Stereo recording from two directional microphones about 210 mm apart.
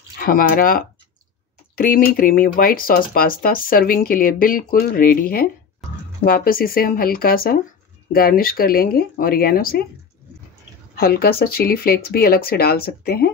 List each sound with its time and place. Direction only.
0.2 s speech: 45° left (ahead or behind)
11.0 s speech: 45° left (ahead or behind)